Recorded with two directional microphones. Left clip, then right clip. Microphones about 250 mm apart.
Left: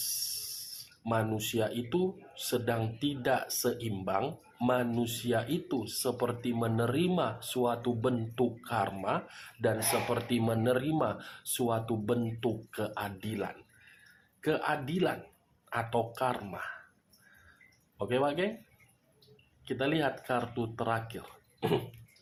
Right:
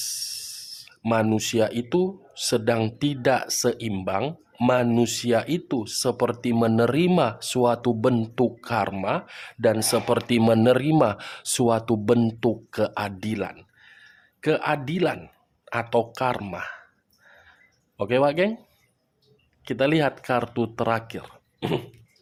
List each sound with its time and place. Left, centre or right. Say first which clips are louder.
0.0 s speech: right 6 dB; right
17.9 s speech: right 9 dB; right
19.6 s speech: right 9 dB; right